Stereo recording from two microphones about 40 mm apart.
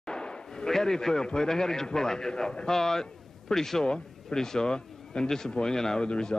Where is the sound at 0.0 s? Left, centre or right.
Left.